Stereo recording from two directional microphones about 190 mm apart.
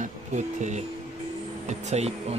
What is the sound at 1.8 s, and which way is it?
Speech, 35° right (ahead or behind).